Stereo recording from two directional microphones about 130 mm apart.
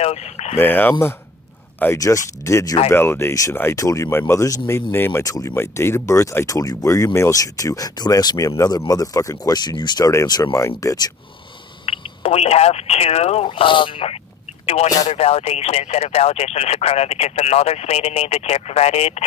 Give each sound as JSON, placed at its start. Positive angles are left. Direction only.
{"t": 0.0, "sound": "speech", "side_deg": 55}
{"t": 0.6, "sound": "speech", "side_deg": 15}
{"t": 11.8, "sound": "speech", "side_deg": 45}